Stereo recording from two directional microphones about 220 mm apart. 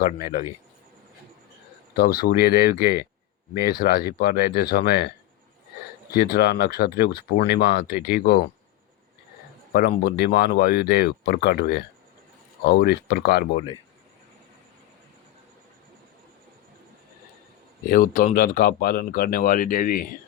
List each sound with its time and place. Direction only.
0.0 s speech: 40° left (ahead or behind)
2.0 s speech: 45° left (ahead or behind)
6.1 s speech: 45° left (ahead or behind)
9.7 s speech: 45° left (ahead or behind)
17.8 s speech: 40° left (ahead or behind)